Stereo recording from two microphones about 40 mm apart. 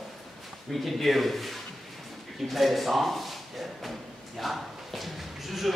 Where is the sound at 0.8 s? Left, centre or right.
Centre.